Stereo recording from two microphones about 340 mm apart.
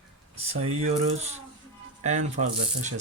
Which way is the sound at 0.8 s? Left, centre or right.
Centre.